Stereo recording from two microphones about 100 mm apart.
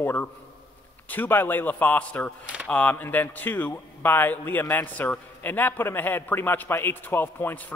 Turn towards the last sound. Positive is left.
turn(degrees=20)  # may be behind; listen again after turning